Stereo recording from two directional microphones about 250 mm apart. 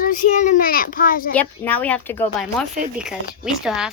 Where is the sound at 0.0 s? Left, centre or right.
Left.